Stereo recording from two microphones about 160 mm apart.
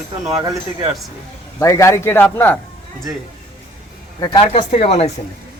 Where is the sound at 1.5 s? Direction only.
20° left (ahead or behind).